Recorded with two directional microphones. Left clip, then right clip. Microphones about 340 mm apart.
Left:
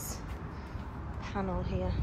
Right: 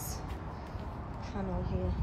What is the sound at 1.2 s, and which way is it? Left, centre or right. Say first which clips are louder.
Speech: left 4 dB; centre.